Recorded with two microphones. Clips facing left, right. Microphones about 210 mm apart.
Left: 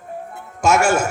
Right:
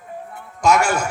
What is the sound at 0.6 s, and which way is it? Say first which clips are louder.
Speech: left 1 dB; 25° left (ahead or behind).